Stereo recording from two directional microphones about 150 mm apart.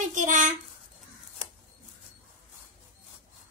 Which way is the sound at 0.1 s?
55° right (ahead or behind).